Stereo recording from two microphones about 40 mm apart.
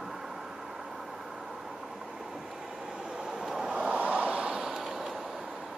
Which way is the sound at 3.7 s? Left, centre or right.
Right.